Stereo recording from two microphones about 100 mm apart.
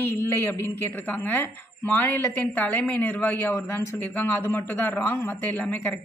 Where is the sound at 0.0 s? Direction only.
20° left (ahead or behind).